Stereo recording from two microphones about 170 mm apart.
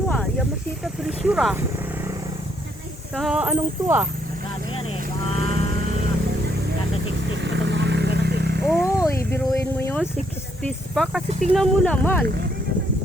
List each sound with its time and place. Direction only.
0.1 s snake: 5° left (ahead or behind)
1.0 s speech: 5° right (ahead or behind)
3.2 s speech: 5° right (ahead or behind)
7.4 s vehicle: 90° right; by 8.6 s 75° right (ahead or behind)
9.0 s speech: 15° left (ahead or behind)
11.3 s speech: 40° right (ahead or behind)
11.5 s speech: 5° left (ahead or behind)